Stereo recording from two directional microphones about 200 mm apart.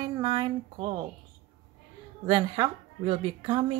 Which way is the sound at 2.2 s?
25° right (ahead or behind).